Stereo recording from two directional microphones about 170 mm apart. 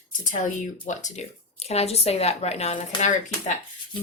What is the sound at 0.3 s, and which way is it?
Speech, 50° left (ahead or behind).